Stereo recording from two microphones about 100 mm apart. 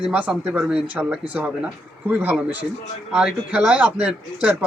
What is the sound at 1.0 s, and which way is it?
Speech, 15° right (ahead or behind).